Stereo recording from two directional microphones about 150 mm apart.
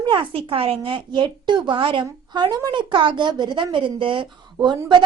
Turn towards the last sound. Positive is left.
turn(degrees=-30)  # may be behind; listen again after turning